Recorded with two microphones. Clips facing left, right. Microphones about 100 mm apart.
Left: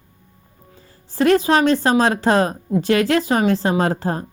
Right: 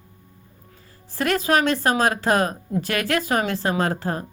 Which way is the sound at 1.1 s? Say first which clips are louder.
Left 5 dB; 25° left (ahead or behind).